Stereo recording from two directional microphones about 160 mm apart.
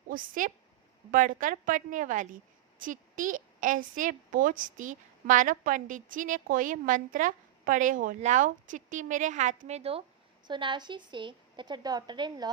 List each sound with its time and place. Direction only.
0.1 s a woman's voice: 55° right (ahead or behind); by 10.0 s 40° right (ahead or behind)
10.4 s a woman's voice: 30° right (ahead or behind)